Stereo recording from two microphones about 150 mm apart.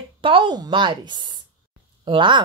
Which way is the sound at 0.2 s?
35° right (ahead or behind).